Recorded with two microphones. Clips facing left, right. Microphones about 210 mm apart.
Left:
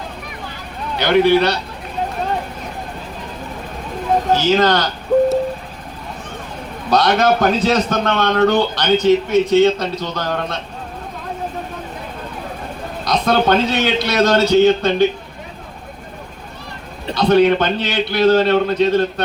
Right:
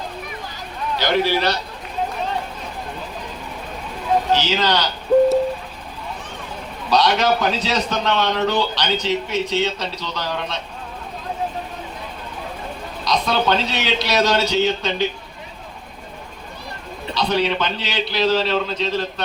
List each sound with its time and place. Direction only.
0.9 s a man's voice: 60° left (ahead or behind)
4.3 s a man's voice: 50° left (ahead or behind)
6.9 s a man's voice: 55° left (ahead or behind)
13.1 s a man's voice: 50° left (ahead or behind)
17.2 s a man's voice: 55° left (ahead or behind)